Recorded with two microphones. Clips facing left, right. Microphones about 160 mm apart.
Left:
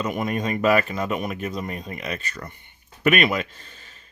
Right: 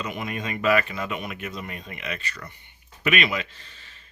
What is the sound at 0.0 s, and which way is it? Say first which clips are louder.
Speech: left 6 dB; 45° left (ahead or behind).